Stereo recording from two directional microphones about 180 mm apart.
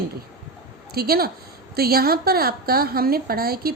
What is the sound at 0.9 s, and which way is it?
A woman's voice, 60° right (ahead or behind).